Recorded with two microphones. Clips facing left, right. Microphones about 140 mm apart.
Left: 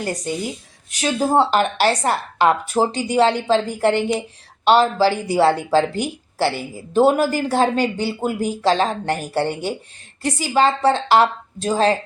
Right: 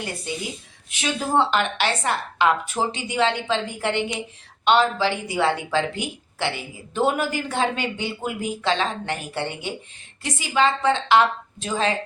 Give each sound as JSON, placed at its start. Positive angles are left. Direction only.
{"t": 0.0, "sound": "speech", "side_deg": 40}